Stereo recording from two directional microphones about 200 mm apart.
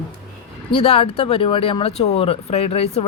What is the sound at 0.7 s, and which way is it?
Speech, 30° left (ahead or behind).